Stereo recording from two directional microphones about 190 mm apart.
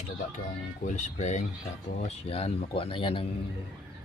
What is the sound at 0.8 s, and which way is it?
Speech, 40° left (ahead or behind).